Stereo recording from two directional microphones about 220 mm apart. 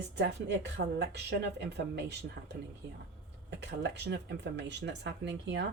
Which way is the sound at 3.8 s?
50° right (ahead or behind).